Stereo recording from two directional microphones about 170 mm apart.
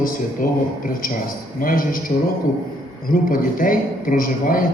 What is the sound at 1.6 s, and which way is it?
Speech, 55° left (ahead or behind).